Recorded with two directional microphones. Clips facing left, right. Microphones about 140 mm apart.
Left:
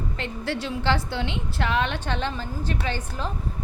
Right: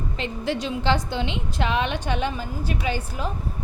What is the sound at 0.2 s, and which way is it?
A woman's voice, 20° right (ahead or behind).